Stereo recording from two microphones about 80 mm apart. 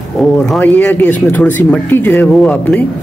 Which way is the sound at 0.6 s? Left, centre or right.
Left.